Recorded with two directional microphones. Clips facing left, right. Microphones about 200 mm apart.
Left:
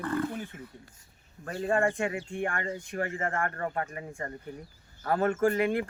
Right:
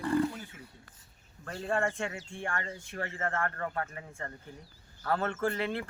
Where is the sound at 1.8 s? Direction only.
15° left (ahead or behind).